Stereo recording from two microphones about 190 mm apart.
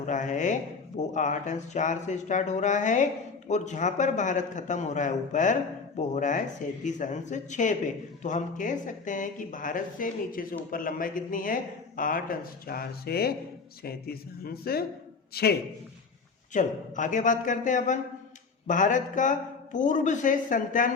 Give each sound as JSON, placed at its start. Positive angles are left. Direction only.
{"t": 0.0, "sound": "a man's voice", "side_deg": 40}
{"t": 16.5, "sound": "a man's voice", "side_deg": 40}